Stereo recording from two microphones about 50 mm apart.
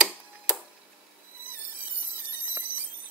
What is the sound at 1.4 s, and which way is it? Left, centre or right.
Squeal, right.